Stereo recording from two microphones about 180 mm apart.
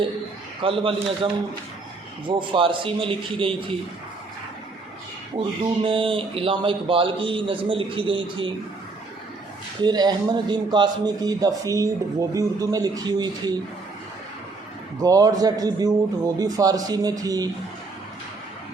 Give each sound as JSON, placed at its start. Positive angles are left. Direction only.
{"t": 0.6, "sound": "a man's voice", "side_deg": -30}
{"t": 5.8, "sound": "a man's voice", "side_deg": -30}
{"t": 9.8, "sound": "a man's voice", "side_deg": -25}
{"t": 15.0, "sound": "a man's voice", "side_deg": -20}